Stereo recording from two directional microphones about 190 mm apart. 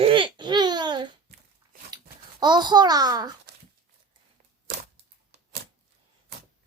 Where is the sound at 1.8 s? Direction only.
20° right (ahead or behind).